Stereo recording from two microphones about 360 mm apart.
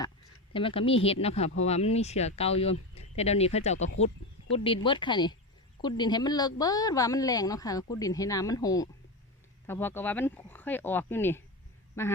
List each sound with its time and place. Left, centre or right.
0.5 s speech: centre